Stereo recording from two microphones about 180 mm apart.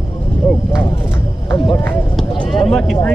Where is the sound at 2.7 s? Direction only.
5° left (ahead or behind).